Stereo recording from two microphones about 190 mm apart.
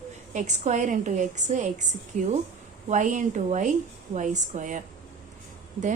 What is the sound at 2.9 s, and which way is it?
A woman's voice, 40° right (ahead or behind).